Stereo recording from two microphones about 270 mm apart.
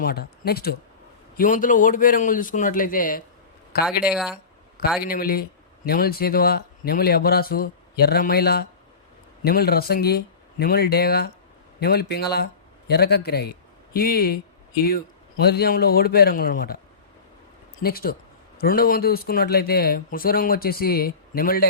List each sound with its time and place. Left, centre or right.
0.0 s a man's voice: left
3.8 s speech: centre
5.0 s speech: left
17.8 s speech: left